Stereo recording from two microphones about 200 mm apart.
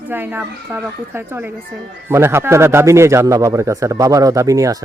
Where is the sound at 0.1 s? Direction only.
10° right (ahead or behind).